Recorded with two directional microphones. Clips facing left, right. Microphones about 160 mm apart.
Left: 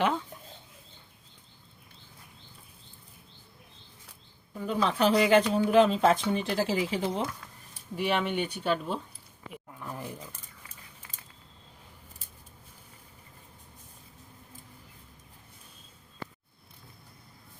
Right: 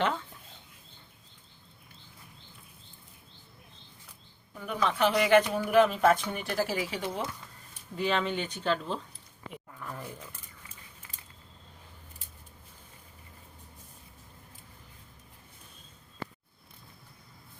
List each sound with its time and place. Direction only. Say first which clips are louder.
4.6 s speech: left 2 dB; 30° left (ahead or behind)
7.7 s speech: left 1 dB; 10° left (ahead or behind)